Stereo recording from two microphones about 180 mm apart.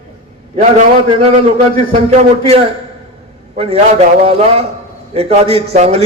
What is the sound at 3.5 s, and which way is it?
A man's voice, 35° right (ahead or behind).